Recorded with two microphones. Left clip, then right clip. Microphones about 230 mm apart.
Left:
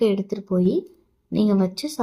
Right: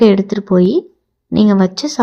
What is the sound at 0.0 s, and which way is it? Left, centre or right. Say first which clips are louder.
Speech: right 10 dB; right.